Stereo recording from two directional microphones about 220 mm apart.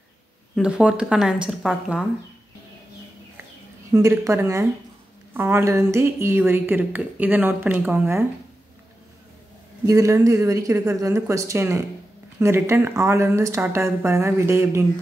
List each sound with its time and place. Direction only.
0.6 s speech: 5° right (ahead or behind)
3.9 s a woman's voice: 15° right (ahead or behind)
9.8 s a woman's voice: 15° right (ahead or behind)